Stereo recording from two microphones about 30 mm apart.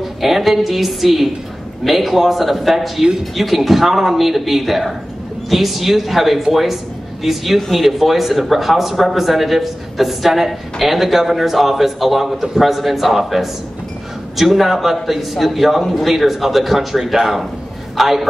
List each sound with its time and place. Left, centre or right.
0.0 s a woman's voice: centre